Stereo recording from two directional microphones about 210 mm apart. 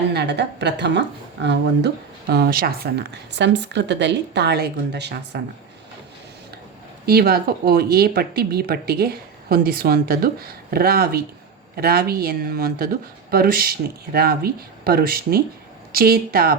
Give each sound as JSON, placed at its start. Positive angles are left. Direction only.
{"t": 0.1, "sound": "speech", "side_deg": -55}
{"t": 7.0, "sound": "speech", "side_deg": -45}